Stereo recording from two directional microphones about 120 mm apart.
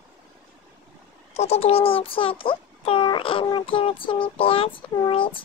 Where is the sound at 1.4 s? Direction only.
60° left (ahead or behind).